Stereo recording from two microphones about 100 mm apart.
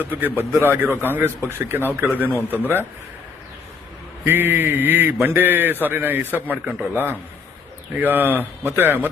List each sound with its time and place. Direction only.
0.3 s a man's voice: 25° right (ahead or behind)
4.3 s a man's voice: 20° right (ahead or behind)